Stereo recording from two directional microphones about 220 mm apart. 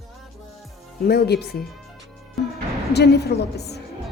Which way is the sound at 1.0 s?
45° left (ahead or behind).